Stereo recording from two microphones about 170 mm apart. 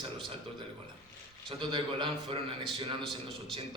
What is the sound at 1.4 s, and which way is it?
A man's voice, 30° right (ahead or behind).